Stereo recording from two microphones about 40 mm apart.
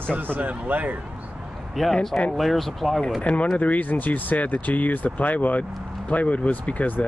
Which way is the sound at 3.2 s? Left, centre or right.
Left.